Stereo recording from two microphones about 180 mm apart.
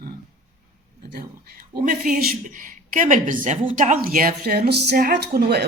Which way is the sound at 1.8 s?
55° right (ahead or behind).